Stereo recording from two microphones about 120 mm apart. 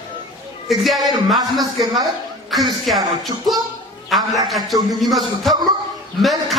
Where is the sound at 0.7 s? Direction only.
Centre (ahead or behind).